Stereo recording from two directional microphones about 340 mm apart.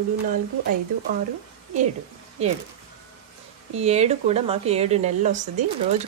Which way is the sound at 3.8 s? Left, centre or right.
Centre.